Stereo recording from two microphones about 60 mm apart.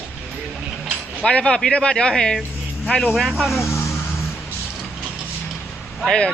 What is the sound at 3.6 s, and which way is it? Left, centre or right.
Vehicle, left.